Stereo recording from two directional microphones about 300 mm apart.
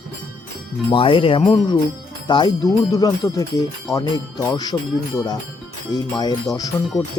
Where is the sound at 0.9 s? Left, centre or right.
Centre.